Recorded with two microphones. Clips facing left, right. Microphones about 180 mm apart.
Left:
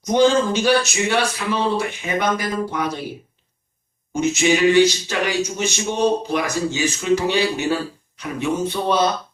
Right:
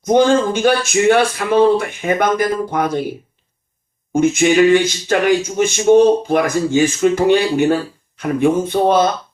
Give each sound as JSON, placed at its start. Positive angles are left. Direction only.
{"t": 0.0, "sound": "speech", "side_deg": -50}
{"t": 4.1, "sound": "speech", "side_deg": -50}